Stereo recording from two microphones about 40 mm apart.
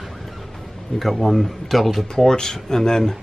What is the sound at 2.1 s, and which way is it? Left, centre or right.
Speech, centre.